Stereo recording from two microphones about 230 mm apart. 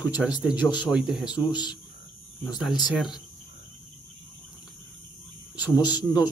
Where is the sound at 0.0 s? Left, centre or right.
Centre.